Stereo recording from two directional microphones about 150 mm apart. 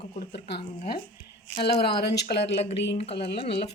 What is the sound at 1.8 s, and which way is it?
Speech, 90° left.